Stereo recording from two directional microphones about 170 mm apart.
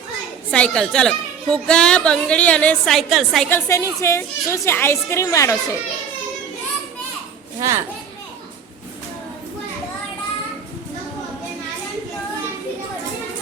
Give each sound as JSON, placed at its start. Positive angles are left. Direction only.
{"t": 0.5, "sound": "a woman's voice", "side_deg": 5}
{"t": 3.5, "sound": "a woman's voice", "side_deg": 15}
{"t": 7.6, "sound": "a child's voice", "side_deg": -20}